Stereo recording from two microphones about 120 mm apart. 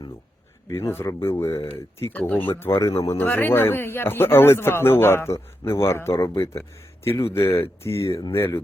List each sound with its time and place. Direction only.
0.7 s speech: 25° left (ahead or behind)